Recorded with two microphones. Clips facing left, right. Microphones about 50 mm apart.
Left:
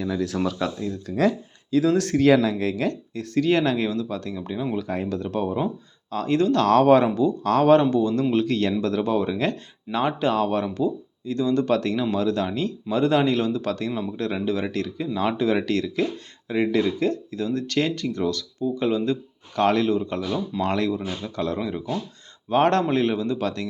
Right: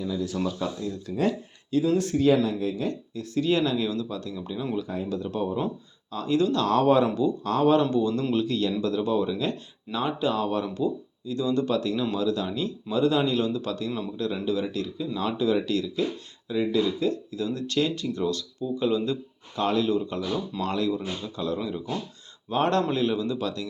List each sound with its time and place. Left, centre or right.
0.0 s speech: left
0.8 s speech: left
1.8 s speech: left
3.3 s speech: left
4.8 s speech: left
5.5 s speech: left
6.1 s speech: left
7.4 s speech: left
20.3 s speech: centre
20.7 s speech: left